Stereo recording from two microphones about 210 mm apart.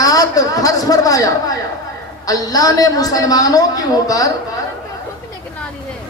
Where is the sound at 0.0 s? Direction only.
15° left (ahead or behind).